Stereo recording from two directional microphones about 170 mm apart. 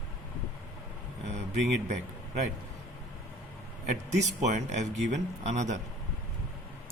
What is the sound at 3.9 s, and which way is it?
Speech, 45° right (ahead or behind).